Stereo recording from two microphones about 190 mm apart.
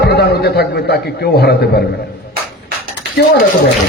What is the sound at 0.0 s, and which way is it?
A man's voice, 60° left (ahead or behind).